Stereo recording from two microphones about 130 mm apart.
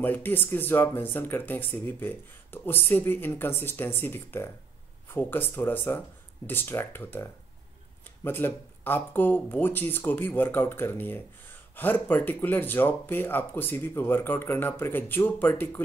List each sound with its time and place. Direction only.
0.0 s speech: 15° left (ahead or behind)